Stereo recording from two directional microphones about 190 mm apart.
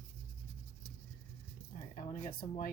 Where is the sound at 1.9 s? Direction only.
45° left (ahead or behind).